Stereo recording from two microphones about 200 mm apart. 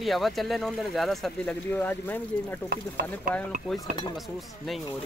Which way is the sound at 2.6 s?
55° right (ahead or behind).